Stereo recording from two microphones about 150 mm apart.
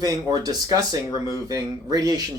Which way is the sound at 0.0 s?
25° right (ahead or behind).